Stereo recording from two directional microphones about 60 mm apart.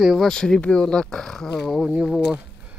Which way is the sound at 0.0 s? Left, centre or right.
Centre.